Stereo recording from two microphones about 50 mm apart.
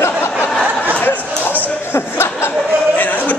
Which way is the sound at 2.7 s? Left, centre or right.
Right.